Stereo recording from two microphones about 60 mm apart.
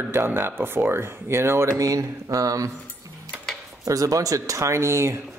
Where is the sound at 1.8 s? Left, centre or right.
Right.